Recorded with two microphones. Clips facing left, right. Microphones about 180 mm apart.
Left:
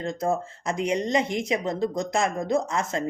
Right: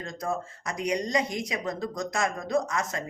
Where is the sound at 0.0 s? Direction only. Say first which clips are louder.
Left 6 dB; 25° left (ahead or behind).